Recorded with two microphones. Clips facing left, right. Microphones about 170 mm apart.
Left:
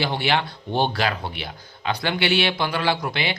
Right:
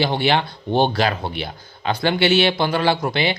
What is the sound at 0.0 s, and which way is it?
Speech, 25° right (ahead or behind).